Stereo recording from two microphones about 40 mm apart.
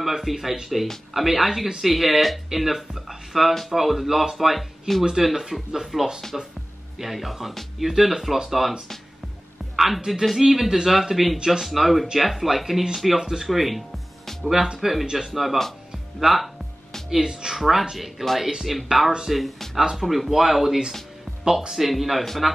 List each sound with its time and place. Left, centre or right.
0.0 s speech: centre
5.2 s speech: centre
9.8 s speech: centre
11.3 s speech: centre
11.6 s speech: centre
13.5 s music: centre
14.8 s speech: centre
17.1 s speech: centre
17.6 s speech: centre
19.8 s speech: centre